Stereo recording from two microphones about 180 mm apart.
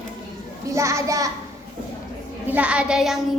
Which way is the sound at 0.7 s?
15° right (ahead or behind).